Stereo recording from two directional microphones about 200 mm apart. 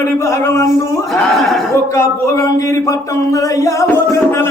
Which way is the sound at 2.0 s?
15° left (ahead or behind).